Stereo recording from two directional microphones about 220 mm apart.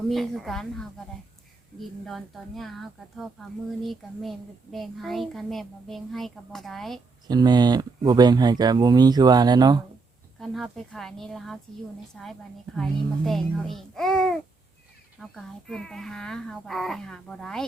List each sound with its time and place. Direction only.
0.1 s a child's voice: centre (ahead or behind)
7.3 s speech: 20° right (ahead or behind)
10.4 s a child's voice: centre (ahead or behind)